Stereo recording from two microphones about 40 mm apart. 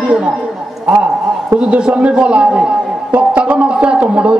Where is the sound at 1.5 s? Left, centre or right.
Right.